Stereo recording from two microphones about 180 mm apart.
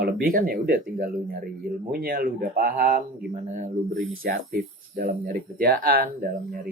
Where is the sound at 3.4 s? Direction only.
35° right (ahead or behind).